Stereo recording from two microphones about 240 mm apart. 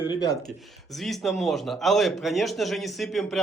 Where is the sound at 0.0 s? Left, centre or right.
Centre.